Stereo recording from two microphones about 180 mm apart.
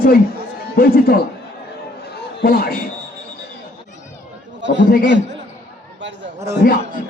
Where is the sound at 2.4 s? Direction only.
60° left (ahead or behind).